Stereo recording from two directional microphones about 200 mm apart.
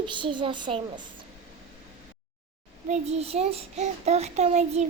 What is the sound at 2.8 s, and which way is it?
A child's voice, 35° right (ahead or behind).